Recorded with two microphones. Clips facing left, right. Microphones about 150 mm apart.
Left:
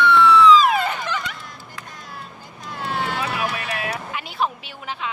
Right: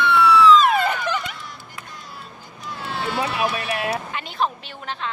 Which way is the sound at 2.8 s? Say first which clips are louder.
Left 2 dB; 50° left (ahead or behind).